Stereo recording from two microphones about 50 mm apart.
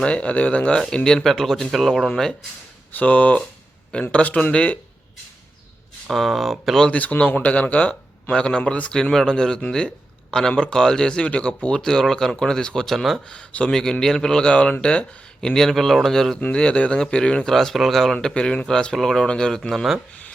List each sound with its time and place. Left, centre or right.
0.0 s a man's voice: left
0.9 s speech: centre
2.9 s a man's voice: left
6.1 s speech: centre
6.8 s a man's voice: left; by 13.2 s centre
13.2 s a man's voice: left
13.7 s speech: centre
16.4 s a man's voice: centre
17.4 s speech: centre
18.3 s a man's voice: centre